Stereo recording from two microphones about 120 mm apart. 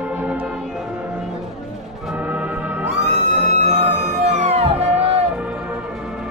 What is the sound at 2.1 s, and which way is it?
Music, 10° right (ahead or behind).